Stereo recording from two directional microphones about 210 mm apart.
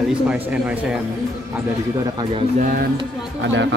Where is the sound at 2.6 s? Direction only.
45° right (ahead or behind).